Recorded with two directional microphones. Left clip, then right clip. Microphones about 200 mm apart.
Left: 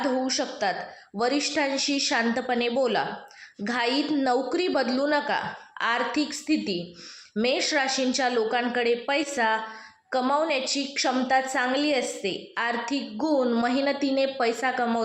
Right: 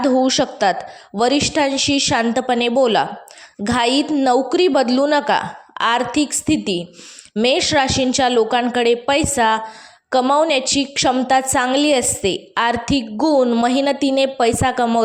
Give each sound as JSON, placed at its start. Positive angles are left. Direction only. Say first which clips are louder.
{"t": 0.1, "sound": "a woman's voice", "louder": "right 11 dB", "side_deg": -40}
{"t": 13.1, "sound": "a woman's voice", "louder": "right 9 dB", "side_deg": -40}